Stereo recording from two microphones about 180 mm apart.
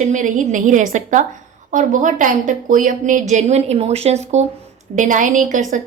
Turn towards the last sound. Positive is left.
turn(degrees=-45)  # may be behind; listen again after turning